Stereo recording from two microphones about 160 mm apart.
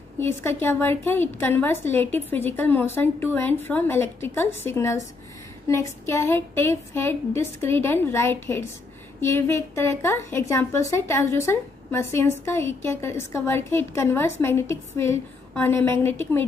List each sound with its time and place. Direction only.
0.2 s a woman's voice: 15° left (ahead or behind)